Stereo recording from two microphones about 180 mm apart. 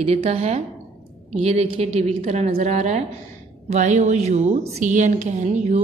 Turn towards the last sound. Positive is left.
turn(degrees=-40)  # may be behind; listen again after turning